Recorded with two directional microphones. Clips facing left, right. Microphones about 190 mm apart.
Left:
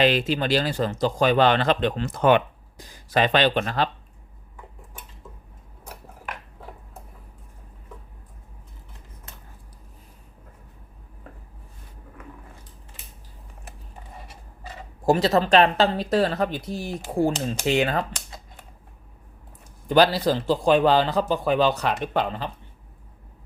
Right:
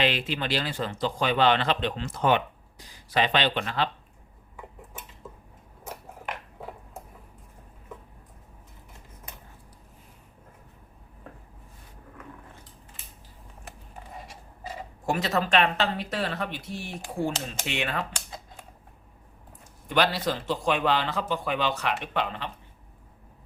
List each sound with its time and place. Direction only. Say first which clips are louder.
0.0 s speech: left 6 dB; 40° left (ahead or behind)
15.0 s a man's voice: left 7 dB; 35° left (ahead or behind)
19.9 s a man's voice: left 7 dB; 35° left (ahead or behind)